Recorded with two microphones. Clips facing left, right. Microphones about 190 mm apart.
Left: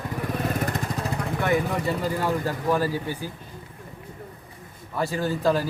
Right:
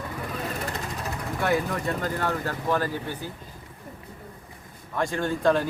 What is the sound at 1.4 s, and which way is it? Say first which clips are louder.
Speech: left 1 dB; centre (ahead or behind).